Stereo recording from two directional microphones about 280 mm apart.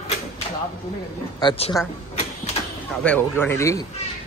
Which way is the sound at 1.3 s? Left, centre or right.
Centre.